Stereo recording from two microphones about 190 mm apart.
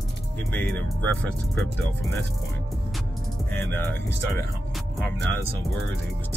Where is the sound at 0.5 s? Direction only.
10° left (ahead or behind).